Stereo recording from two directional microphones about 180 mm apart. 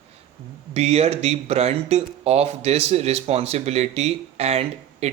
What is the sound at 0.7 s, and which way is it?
Speech, 35° right (ahead or behind).